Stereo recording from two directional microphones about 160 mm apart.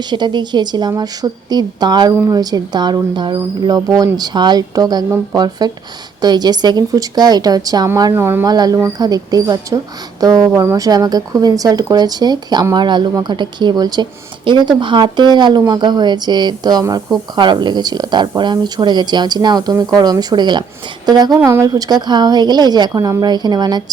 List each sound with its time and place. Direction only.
0.0 s speech: 30° right (ahead or behind)